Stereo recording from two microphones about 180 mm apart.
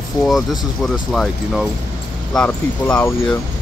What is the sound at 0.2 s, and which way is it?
Speech, centre (ahead or behind).